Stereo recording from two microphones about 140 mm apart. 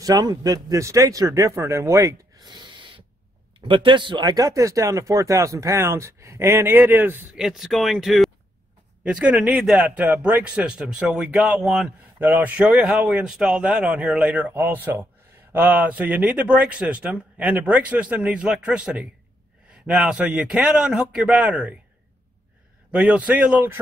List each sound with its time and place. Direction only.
0.0 s speech: 25° right (ahead or behind)
7.3 s a man's voice: 5° right (ahead or behind)
22.8 s a man's voice: 10° right (ahead or behind)